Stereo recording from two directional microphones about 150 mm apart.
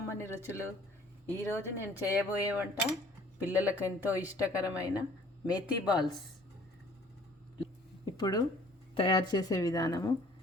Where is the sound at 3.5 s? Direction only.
10° right (ahead or behind).